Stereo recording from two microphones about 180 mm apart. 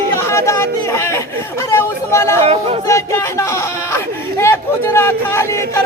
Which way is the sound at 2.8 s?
15° left (ahead or behind).